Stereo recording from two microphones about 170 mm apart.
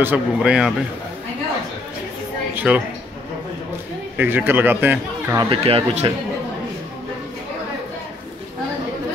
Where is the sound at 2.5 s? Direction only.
10° right (ahead or behind).